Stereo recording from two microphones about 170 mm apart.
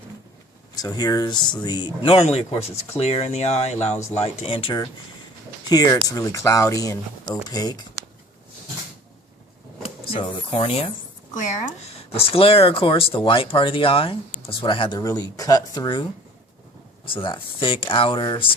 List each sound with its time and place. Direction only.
0.8 s speech: 25° left (ahead or behind)
9.8 s speech: 35° left (ahead or behind)
11.3 s speech: 45° left (ahead or behind); by 16.0 s 25° left (ahead or behind)
17.1 s speech: 30° left (ahead or behind)